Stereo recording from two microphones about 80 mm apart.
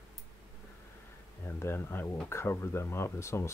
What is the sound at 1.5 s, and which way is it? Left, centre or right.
Speech, left.